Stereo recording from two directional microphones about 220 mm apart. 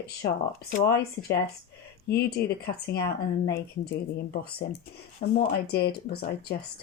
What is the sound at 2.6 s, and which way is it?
Speech, 45° left (ahead or behind).